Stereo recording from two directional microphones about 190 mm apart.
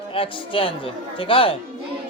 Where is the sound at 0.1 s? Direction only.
30° left (ahead or behind).